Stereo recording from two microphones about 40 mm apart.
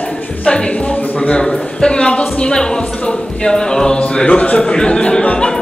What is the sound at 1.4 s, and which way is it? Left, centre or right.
Speech, left.